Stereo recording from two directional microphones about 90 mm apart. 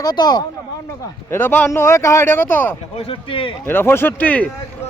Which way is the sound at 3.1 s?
90° left.